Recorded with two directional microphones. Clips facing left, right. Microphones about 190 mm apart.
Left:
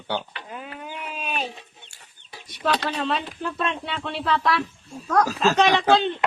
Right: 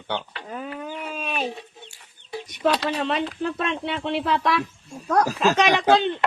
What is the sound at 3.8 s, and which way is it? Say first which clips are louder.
Speech: right 3 dB; 20° right (ahead or behind).